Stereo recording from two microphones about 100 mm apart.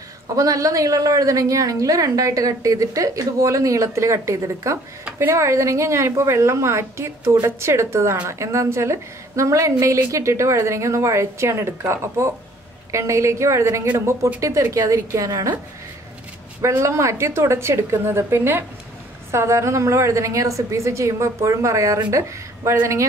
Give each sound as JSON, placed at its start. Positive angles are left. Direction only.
{"t": 0.4, "sound": "a woman's voice", "side_deg": -35}
{"t": 16.6, "sound": "a woman's voice", "side_deg": -30}